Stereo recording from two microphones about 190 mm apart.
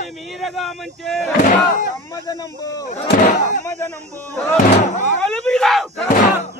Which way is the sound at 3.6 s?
15° left (ahead or behind).